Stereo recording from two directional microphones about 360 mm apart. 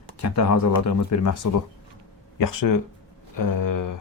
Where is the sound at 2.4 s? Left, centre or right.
Left.